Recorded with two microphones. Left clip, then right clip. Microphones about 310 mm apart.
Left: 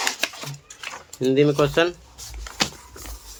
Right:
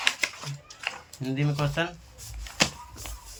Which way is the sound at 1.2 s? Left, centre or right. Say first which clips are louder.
Left 13 dB; centre.